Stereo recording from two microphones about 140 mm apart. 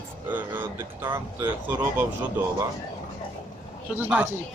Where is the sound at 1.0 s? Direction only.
30° right (ahead or behind).